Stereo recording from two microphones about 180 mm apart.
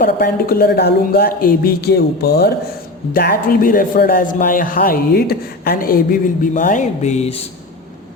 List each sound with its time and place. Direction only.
0.0 s speech: 55° left (ahead or behind); by 7.3 s 40° left (ahead or behind)